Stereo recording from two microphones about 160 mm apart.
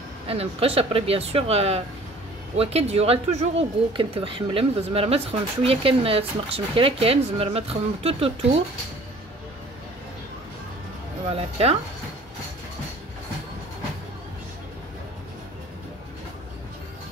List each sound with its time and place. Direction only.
0.3 s speech: 35° right (ahead or behind)
11.3 s speech: 40° right (ahead or behind)